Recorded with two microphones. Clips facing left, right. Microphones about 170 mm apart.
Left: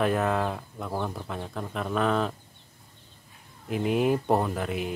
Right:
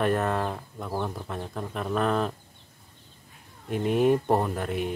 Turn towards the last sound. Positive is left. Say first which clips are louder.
# right 1 dB
turn(degrees=0)  # may be behind; listen again after turning